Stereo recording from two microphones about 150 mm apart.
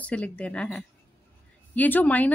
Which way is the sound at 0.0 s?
10° left (ahead or behind).